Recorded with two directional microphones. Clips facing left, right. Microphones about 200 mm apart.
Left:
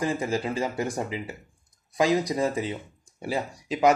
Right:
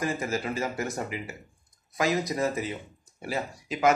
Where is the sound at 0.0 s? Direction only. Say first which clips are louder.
Left 3 dB; 30° left (ahead or behind).